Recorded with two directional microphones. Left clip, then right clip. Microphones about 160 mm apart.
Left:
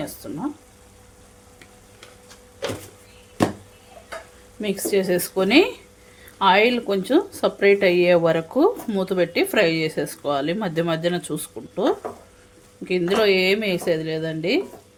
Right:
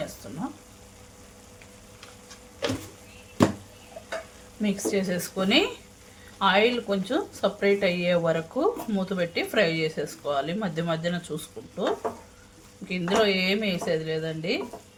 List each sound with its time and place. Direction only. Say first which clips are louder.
4.6 s speech: left 5 dB; 80° left
12.9 s speech: left 5 dB; 65° left (ahead or behind)